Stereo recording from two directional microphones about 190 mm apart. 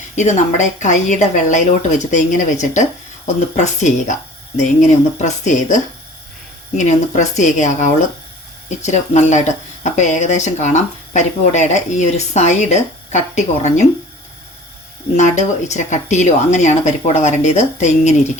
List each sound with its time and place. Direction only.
0.2 s speech: 40° left (ahead or behind)
15.1 s speech: 40° left (ahead or behind)